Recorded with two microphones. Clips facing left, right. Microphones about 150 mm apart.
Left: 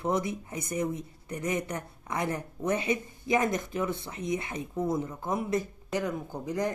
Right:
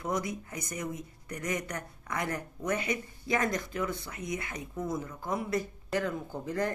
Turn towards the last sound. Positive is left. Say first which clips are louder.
# left 1 dB
turn(degrees=15)  # may be behind; listen again after turning